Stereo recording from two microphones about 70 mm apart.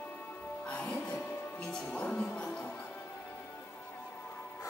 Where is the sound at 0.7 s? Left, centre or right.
Centre.